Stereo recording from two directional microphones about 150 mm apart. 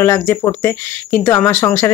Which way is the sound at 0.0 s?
15° left (ahead or behind).